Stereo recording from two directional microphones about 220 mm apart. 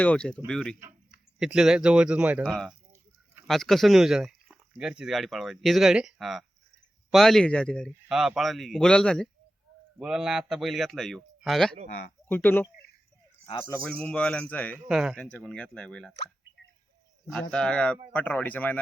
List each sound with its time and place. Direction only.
0.0 s a man's voice: 5° left (ahead or behind)
13.8 s a man's voice: 5° left (ahead or behind)
17.5 s a man's voice: 5° left (ahead or behind)